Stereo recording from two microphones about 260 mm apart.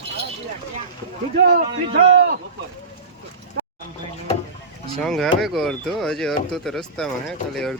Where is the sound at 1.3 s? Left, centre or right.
Right.